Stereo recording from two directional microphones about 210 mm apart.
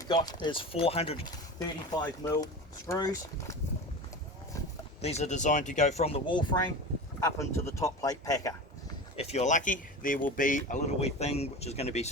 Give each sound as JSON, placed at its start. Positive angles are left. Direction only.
{"t": 0.0, "sound": "speech", "side_deg": 20}
{"t": 5.0, "sound": "speech", "side_deg": 30}
{"t": 7.3, "sound": "speech", "side_deg": 15}
{"t": 9.1, "sound": "speech", "side_deg": 30}